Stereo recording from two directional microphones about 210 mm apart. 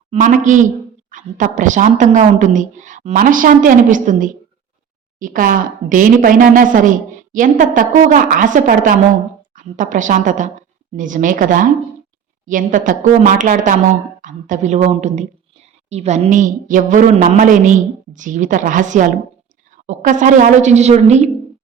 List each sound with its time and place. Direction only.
0.1 s a woman's voice: 35° right (ahead or behind)